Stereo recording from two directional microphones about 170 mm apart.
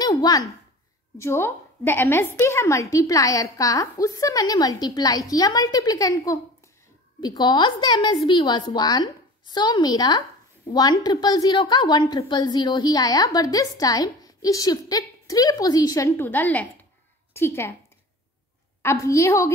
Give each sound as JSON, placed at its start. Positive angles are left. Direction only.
{"t": 0.0, "sound": "a sound", "side_deg": 20}
{"t": 1.1, "sound": "a woman's voice", "side_deg": 15}
{"t": 18.8, "sound": "a woman's voice", "side_deg": 15}